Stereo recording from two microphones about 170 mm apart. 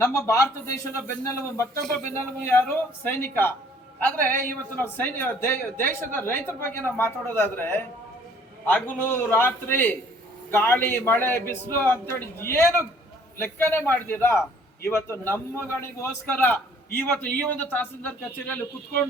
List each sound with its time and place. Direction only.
0.0 s a man's voice: 15° left (ahead or behind)